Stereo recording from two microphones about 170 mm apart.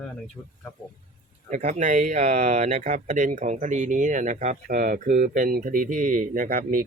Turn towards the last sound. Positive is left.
turn(degrees=-55)  # may be behind; listen again after turning